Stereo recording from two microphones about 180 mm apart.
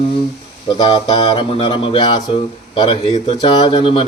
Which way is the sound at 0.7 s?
30° left (ahead or behind).